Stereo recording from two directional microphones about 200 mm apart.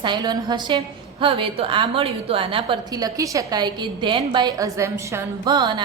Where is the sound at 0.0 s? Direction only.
20° right (ahead or behind).